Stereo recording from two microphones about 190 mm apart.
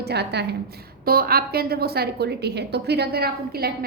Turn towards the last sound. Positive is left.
turn(degrees=-55)  # may be behind; listen again after turning